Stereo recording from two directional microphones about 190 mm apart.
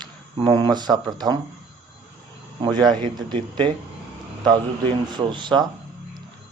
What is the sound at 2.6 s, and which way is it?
A man's voice, 25° right (ahead or behind).